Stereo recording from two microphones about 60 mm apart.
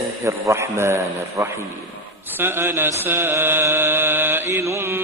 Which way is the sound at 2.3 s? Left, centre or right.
Right.